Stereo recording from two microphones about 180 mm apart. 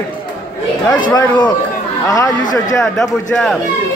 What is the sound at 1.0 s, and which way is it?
Speech, 25° left (ahead or behind).